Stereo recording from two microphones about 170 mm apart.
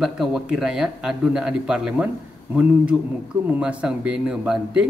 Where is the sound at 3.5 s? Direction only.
5° right (ahead or behind).